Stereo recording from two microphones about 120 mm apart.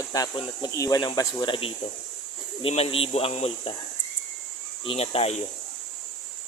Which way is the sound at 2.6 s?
55° left (ahead or behind).